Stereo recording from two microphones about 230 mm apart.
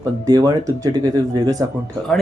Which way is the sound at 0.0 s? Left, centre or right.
Centre.